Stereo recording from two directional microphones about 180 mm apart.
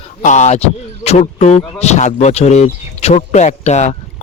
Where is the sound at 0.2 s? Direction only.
40° left (ahead or behind).